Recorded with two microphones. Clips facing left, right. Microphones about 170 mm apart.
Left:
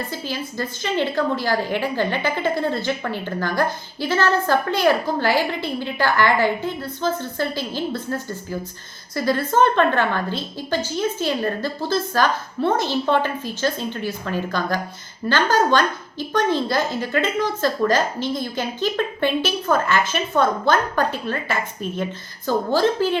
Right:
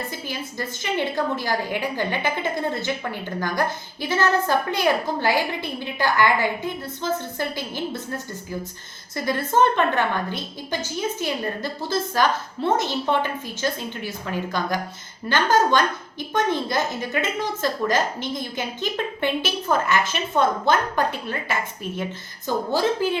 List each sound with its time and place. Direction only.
0.3 s a woman's voice: 15° right (ahead or behind)
9.1 s a woman's voice: 20° right (ahead or behind)